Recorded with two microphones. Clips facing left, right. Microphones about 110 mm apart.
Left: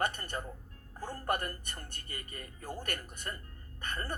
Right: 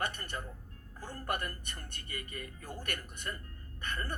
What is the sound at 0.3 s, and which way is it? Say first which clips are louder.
A man's voice: left 2 dB; 35° left (ahead or behind).